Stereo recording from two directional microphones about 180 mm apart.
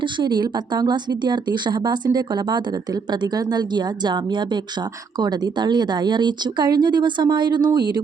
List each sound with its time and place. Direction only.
0.0 s speech: 25° right (ahead or behind)